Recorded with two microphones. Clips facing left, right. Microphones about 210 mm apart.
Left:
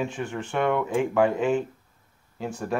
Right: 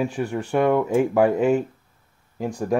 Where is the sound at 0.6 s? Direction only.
10° right (ahead or behind).